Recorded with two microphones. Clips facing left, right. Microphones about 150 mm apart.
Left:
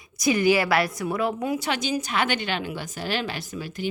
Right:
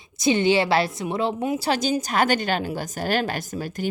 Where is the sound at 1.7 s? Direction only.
35° right (ahead or behind).